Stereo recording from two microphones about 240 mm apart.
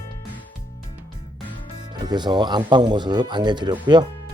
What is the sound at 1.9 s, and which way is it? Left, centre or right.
Speech, centre.